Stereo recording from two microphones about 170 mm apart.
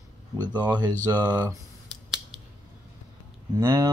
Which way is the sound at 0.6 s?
20° right (ahead or behind).